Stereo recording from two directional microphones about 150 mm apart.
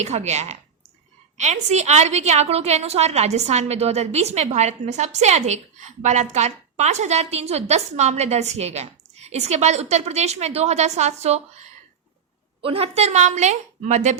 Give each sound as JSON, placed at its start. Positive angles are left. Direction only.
{"t": 0.0, "sound": "a woman's voice", "side_deg": -50}
{"t": 12.6, "sound": "a woman's voice", "side_deg": -40}